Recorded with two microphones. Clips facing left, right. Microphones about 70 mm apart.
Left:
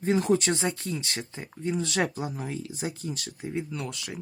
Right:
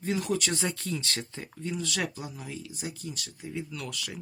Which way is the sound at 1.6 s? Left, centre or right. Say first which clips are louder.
Left 5 dB; left.